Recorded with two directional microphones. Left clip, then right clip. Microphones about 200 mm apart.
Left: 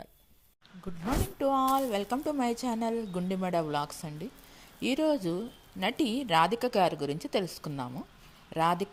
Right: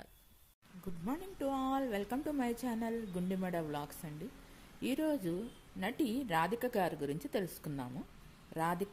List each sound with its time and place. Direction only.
1.4 s a woman's voice: 20° left (ahead or behind)